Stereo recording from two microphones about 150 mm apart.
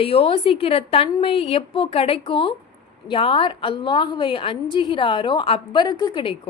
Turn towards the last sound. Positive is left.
turn(degrees=35)  # may be behind; listen again after turning